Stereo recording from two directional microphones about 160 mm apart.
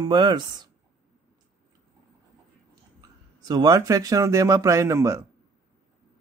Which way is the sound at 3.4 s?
25° right (ahead or behind).